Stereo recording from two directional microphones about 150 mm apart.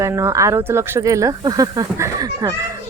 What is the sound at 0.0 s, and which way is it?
Speech, 20° right (ahead or behind).